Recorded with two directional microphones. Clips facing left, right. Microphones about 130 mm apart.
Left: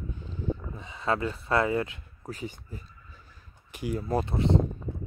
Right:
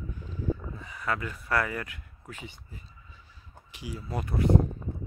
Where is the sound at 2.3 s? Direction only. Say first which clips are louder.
Left 7 dB; 40° left (ahead or behind).